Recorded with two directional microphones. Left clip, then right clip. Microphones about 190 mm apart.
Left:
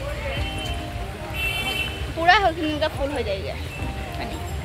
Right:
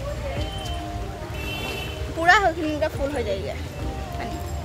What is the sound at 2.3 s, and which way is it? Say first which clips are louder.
Speech: even; 5° right (ahead or behind).